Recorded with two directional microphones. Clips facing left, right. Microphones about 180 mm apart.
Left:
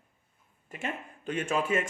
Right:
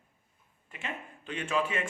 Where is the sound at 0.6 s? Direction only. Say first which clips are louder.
Left 4 dB; 45° left (ahead or behind).